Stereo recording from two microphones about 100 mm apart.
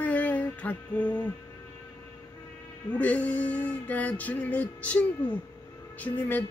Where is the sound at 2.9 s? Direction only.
15° left (ahead or behind).